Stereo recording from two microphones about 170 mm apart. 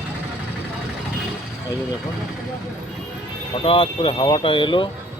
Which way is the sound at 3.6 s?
30° left (ahead or behind).